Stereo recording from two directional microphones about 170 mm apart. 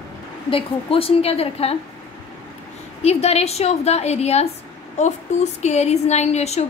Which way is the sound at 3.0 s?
40° left (ahead or behind).